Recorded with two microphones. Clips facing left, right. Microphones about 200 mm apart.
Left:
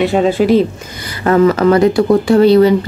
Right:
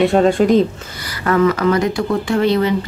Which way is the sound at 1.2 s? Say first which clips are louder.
Left 5 dB; 30° left (ahead or behind).